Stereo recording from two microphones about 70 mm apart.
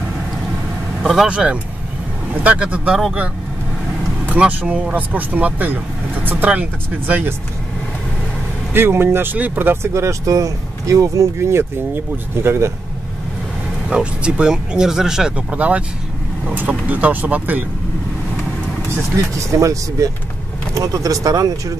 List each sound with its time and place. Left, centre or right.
1.2 s speech: centre
4.4 s speech: right
8.7 s speech: right
9.9 s speech: right
13.8 s speech: centre
19.5 s speech: right